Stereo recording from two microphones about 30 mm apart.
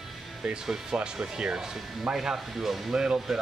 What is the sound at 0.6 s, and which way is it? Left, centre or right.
Speech, centre.